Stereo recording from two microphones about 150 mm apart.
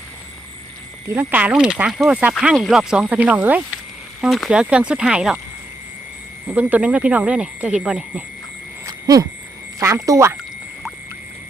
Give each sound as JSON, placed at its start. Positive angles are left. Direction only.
{"t": 1.0, "sound": "speech", "side_deg": -15}
{"t": 6.5, "sound": "speech", "side_deg": -10}
{"t": 8.9, "sound": "a sound", "side_deg": -25}
{"t": 9.8, "sound": "speech", "side_deg": -20}